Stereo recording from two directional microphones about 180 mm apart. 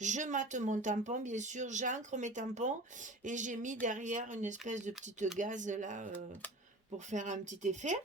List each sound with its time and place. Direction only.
0.0 s speech: 40° right (ahead or behind)
7.1 s speech: 40° right (ahead or behind)